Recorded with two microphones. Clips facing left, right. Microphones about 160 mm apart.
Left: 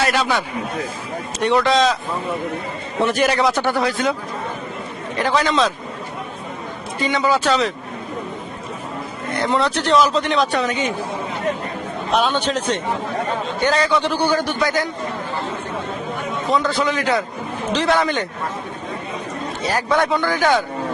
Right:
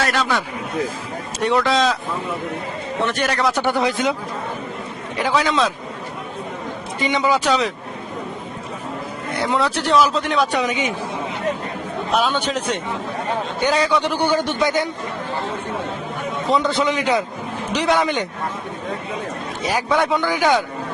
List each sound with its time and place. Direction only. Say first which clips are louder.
0.1 s speech: left 1 dB; 5° left (ahead or behind)
3.0 s speech: left 4 dB; 5° left (ahead or behind)
3.5 s speech: even; 15° right (ahead or behind)
5.1 s speech: left 1 dB; 5° right (ahead or behind)
7.0 s speech: even; 15° right (ahead or behind)
9.4 s speech: left 1 dB; 5° right (ahead or behind)
12.1 s a man's voice: left 1 dB; 5° right (ahead or behind); by 14.8 s 25° right (ahead or behind)
16.5 s a man's voice: right 1 dB; 20° right (ahead or behind)
19.9 s speech: left 1 dB; centre (ahead or behind)
20.1 s speech: even; 15° right (ahead or behind)